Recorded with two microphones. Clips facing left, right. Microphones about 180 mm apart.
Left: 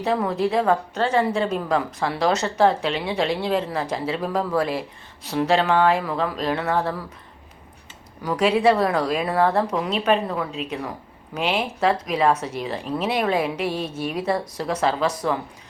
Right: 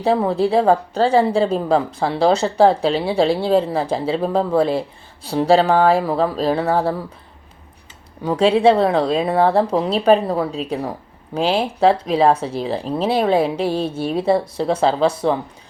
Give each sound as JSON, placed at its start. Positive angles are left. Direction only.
{"t": 0.0, "sound": "a woman's voice", "side_deg": -30}
{"t": 8.2, "sound": "speech", "side_deg": -30}